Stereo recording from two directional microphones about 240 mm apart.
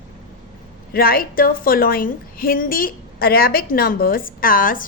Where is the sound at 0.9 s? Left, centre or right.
Left.